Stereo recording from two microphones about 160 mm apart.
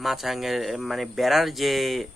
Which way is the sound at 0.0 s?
Centre (ahead or behind).